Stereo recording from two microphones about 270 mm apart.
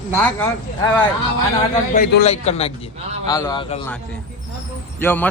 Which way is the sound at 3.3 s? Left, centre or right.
Centre.